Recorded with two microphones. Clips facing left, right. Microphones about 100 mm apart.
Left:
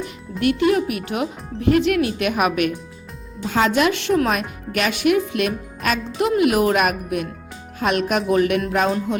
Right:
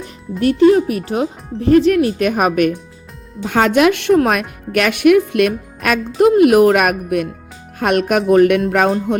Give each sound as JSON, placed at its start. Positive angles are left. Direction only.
{"t": 0.0, "sound": "speech", "side_deg": -35}
{"t": 3.4, "sound": "speech", "side_deg": -60}